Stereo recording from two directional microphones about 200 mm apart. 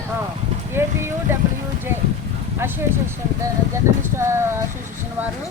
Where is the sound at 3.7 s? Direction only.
15° right (ahead or behind).